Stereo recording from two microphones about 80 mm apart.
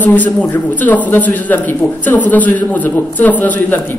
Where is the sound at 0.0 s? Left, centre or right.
Centre.